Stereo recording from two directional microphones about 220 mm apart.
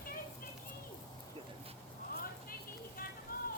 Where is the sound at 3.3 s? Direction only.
40° left (ahead or behind).